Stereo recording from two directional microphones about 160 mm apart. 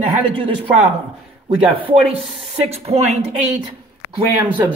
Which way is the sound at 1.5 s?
35° right (ahead or behind).